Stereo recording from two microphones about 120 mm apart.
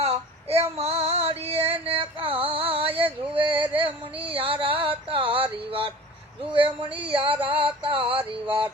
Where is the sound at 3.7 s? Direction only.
50° right (ahead or behind).